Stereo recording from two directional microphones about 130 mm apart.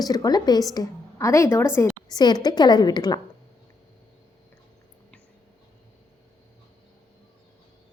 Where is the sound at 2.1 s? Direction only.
30° left (ahead or behind).